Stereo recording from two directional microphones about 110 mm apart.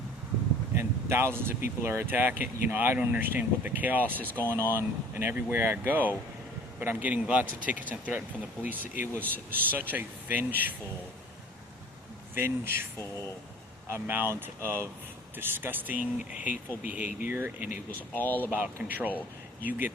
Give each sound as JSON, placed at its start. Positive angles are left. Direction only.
{"t": 0.7, "sound": "speech", "side_deg": -20}
{"t": 4.1, "sound": "speech", "side_deg": 15}
{"t": 4.4, "sound": "speech", "side_deg": -20}
{"t": 9.3, "sound": "speech", "side_deg": -15}
{"t": 12.3, "sound": "speech", "side_deg": -20}
{"t": 13.8, "sound": "speech", "side_deg": -20}
{"t": 18.1, "sound": "speech", "side_deg": 15}
{"t": 18.5, "sound": "speech", "side_deg": -15}